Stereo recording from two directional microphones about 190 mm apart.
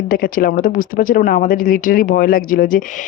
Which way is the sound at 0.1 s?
50° left (ahead or behind).